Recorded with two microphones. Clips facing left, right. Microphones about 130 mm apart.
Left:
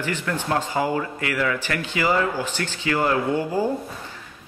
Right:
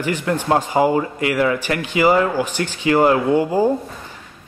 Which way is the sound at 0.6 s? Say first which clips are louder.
Right 7 dB; 15° right (ahead or behind).